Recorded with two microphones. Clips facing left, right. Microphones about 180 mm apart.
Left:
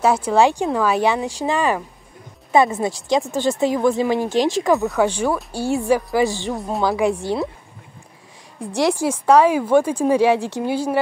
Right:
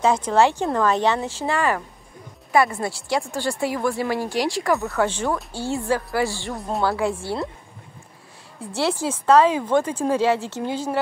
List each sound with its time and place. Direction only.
0.0 s a woman's voice: 10° left (ahead or behind)
6.5 s a woman's voice: centre (ahead or behind)
6.8 s speech: 15° left (ahead or behind)
8.5 s speech: 15° left (ahead or behind)